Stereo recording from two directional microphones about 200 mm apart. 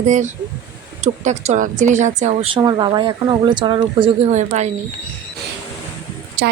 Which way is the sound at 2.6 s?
20° right (ahead or behind).